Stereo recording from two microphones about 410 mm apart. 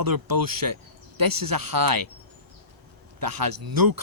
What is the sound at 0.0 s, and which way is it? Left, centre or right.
Speech, right.